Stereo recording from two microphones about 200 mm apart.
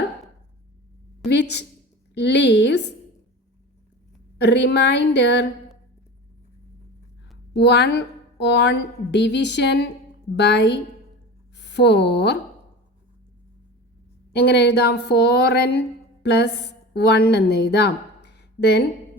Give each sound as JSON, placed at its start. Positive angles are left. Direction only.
{"t": 1.3, "sound": "a woman's voice", "side_deg": 60}
{"t": 4.4, "sound": "a woman's voice", "side_deg": 60}
{"t": 7.5, "sound": "a woman's voice", "side_deg": 55}
{"t": 14.3, "sound": "a woman's voice", "side_deg": 55}